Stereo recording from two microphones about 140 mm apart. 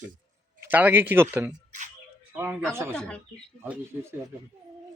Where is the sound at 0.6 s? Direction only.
15° right (ahead or behind).